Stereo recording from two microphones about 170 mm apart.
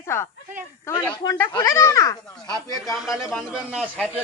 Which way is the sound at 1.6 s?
15° left (ahead or behind).